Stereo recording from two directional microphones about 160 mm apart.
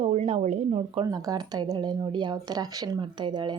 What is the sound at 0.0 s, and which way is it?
Speech, 40° right (ahead or behind).